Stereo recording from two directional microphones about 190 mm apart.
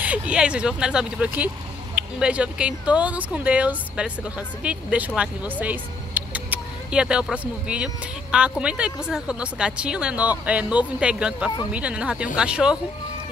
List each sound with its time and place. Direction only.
0.0 s speech: 5° right (ahead or behind)